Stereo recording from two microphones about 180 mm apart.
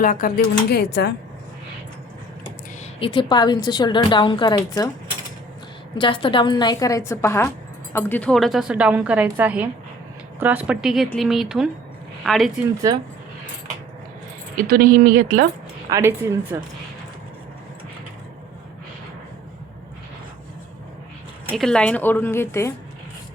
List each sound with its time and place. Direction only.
0.0 s speech: 50° left (ahead or behind)
0.7 s speech: 65° left (ahead or behind)
3.0 s a woman's voice: 30° left (ahead or behind)
6.0 s a woman's voice: 30° left (ahead or behind); by 12.5 s centre (ahead or behind)
12.9 s speech: 20° right (ahead or behind)
14.7 s speech: 55° right (ahead or behind)
15.9 s speech: 15° right (ahead or behind)
21.5 s a woman's voice: 5° left (ahead or behind)